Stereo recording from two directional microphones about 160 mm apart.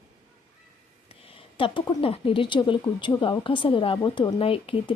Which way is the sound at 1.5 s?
30° left (ahead or behind).